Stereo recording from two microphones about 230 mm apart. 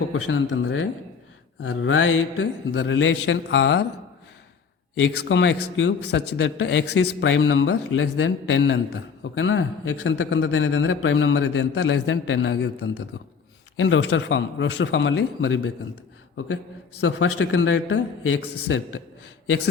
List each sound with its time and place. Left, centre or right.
0.1 s a man's voice: left
4.9 s a man's voice: left
17.0 s a man's voice: left